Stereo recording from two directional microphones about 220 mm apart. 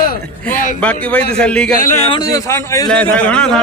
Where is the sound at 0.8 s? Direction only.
5° left (ahead or behind).